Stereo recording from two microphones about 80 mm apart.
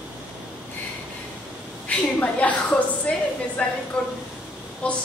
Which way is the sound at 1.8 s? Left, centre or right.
Centre.